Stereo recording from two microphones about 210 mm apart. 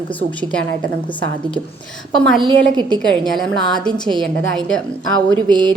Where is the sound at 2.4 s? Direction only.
20° right (ahead or behind).